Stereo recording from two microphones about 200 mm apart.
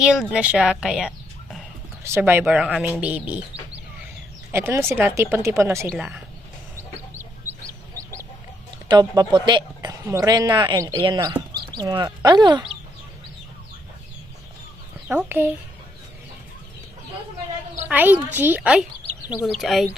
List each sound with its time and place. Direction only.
0.0 s speech: 5° right (ahead or behind)
4.5 s speech: 15° right (ahead or behind)
7.1 s chicken: 10° right (ahead or behind)
8.9 s a woman's voice: 20° right (ahead or behind)
15.0 s speech: 10° right (ahead or behind)
17.8 s a woman's voice: 10° right (ahead or behind)